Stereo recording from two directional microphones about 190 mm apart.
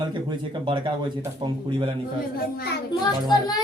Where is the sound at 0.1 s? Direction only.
25° right (ahead or behind).